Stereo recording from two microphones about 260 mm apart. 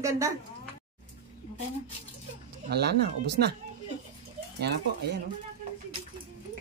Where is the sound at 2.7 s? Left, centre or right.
Right.